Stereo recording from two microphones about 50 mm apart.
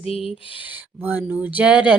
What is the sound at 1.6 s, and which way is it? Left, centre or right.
Music, right.